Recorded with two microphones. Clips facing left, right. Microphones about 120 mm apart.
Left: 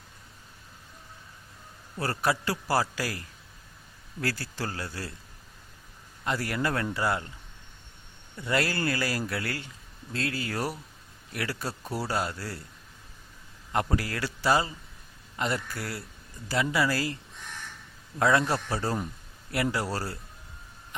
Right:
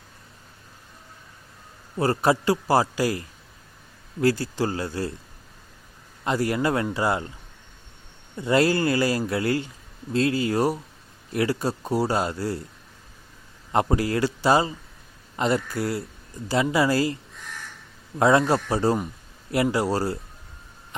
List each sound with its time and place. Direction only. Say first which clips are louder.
2.0 s speech: right 7 dB; 25° right (ahead or behind)
6.2 s speech: right 6 dB; 20° right (ahead or behind)
8.4 s speech: right 8 dB; 25° right (ahead or behind)
13.7 s speech: right 7 dB; 25° right (ahead or behind)
18.2 s speech: right 5 dB; 25° right (ahead or behind)